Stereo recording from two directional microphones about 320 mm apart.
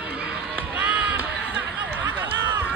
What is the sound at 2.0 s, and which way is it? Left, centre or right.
Run, centre.